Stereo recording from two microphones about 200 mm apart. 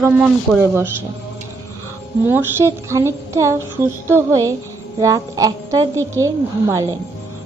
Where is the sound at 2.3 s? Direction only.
10° right (ahead or behind).